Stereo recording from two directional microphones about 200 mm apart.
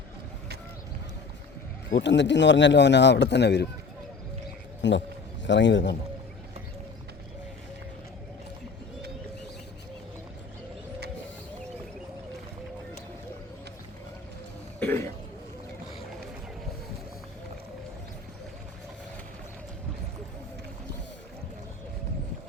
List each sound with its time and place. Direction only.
1.9 s speech: 60° left (ahead or behind)
4.8 s speech: 65° left (ahead or behind)
14.8 s throat clearing: 10° left (ahead or behind)